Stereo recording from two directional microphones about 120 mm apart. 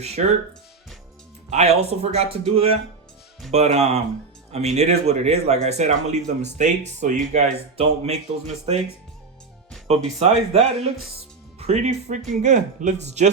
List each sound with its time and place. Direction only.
1.5 s speech: 65° right (ahead or behind)
10.2 s speech: 65° right (ahead or behind)
12.3 s speech: 85° right